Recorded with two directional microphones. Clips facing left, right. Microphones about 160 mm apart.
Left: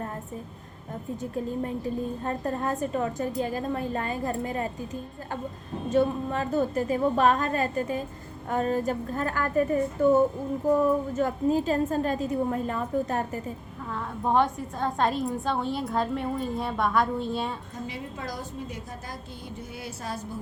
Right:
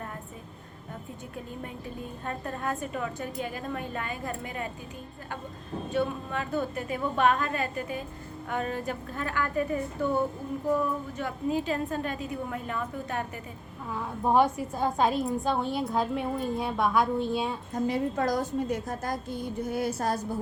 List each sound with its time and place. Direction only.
2.2 s a woman's voice: 35° left (ahead or behind)
5.9 s a woman's voice: 40° left (ahead or behind)
11.2 s a woman's voice: 40° left (ahead or behind)
13.9 s a woman's voice: 5° right (ahead or behind)
17.8 s a woman's voice: 45° right (ahead or behind)